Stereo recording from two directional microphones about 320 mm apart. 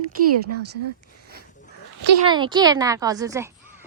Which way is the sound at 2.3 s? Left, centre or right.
Centre.